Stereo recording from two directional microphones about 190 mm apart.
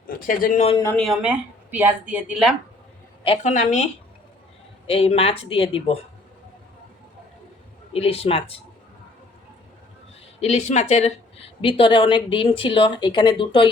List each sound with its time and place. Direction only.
0.1 s speech: 50° left (ahead or behind)
0.9 s speech: centre (ahead or behind)
3.2 s speech: 40° left (ahead or behind)
4.9 s speech: 30° left (ahead or behind)
7.9 s speech: 30° left (ahead or behind)
10.4 s a woman's voice: 35° left (ahead or behind)